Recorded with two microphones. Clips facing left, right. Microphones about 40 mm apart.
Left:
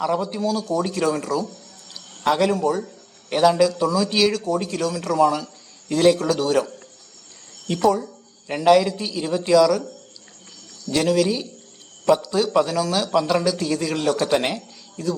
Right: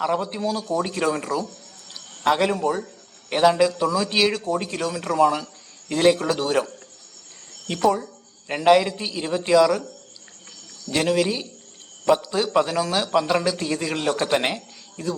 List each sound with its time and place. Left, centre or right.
0.0 s a man's voice: right
1.9 s a sound: centre
3.2 s a man's voice: right
7.7 s a man's voice: right
10.8 s a man's voice: right